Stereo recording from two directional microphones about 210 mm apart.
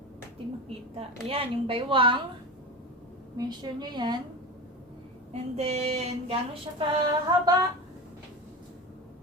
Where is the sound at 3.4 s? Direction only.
20° right (ahead or behind).